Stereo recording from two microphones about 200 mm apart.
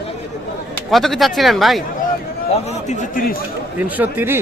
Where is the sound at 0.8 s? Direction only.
Centre (ahead or behind).